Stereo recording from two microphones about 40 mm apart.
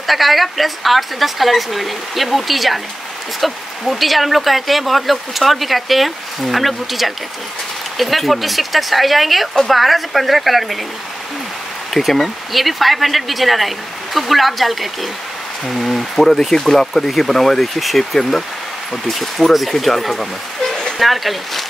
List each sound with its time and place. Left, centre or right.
0.0 s speech: centre
11.9 s speech: centre